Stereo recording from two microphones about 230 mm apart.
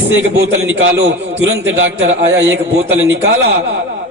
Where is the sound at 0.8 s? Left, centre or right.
Right.